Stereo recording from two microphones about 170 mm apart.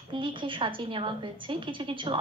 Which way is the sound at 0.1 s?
30° right (ahead or behind).